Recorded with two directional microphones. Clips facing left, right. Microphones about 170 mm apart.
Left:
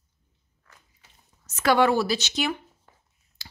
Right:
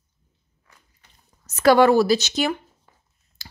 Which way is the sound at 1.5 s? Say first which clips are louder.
Right 6 dB; 40° right (ahead or behind).